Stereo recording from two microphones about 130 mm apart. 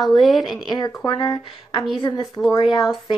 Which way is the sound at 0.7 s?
35° left (ahead or behind).